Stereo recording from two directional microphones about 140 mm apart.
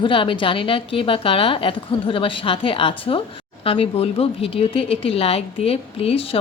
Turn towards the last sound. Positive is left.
turn(degrees=45)  # may be behind; listen again after turning